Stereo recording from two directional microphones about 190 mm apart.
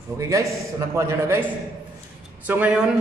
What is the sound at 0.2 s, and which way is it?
A man's voice, 15° right (ahead or behind).